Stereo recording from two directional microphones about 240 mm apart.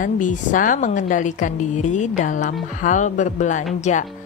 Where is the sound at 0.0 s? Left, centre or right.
Left.